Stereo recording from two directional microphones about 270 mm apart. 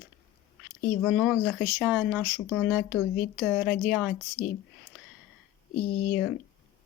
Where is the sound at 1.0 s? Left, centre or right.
Centre.